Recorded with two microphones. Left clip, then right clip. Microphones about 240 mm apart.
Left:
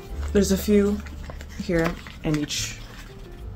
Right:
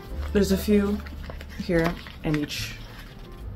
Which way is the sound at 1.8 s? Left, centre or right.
Centre.